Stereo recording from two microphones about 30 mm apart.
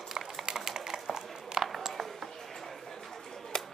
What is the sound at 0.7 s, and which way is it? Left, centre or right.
Typing, centre.